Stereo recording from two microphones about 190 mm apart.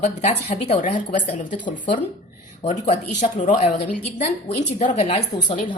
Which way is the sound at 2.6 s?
40° left (ahead or behind).